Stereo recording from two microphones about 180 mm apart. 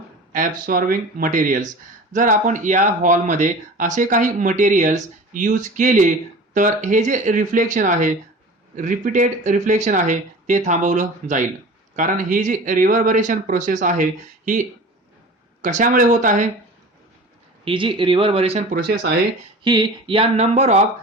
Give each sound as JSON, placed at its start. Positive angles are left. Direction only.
{"t": 0.3, "sound": "speech", "side_deg": -50}
{"t": 15.6, "sound": "speech", "side_deg": -45}
{"t": 17.7, "sound": "speech", "side_deg": -30}